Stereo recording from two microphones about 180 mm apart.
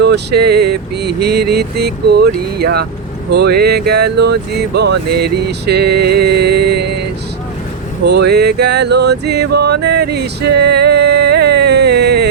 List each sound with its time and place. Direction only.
0.0 s music: 65° right (ahead or behind)
8.0 s music: 65° right (ahead or behind)